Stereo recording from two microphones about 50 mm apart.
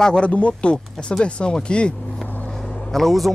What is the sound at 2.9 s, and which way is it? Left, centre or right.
Speech, centre.